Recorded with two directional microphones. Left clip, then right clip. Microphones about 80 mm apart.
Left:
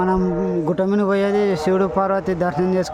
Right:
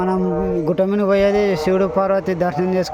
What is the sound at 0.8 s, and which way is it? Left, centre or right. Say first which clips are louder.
A man's voice: right 4 dB; centre.